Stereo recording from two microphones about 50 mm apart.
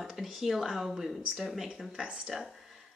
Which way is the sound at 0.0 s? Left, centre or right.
Centre.